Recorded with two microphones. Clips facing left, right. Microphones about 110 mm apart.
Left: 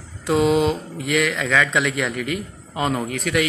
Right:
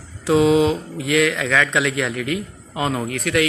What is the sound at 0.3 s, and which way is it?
A man's voice, centre (ahead or behind).